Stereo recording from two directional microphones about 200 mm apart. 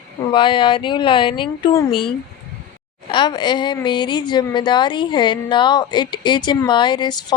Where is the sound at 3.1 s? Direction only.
20° left (ahead or behind).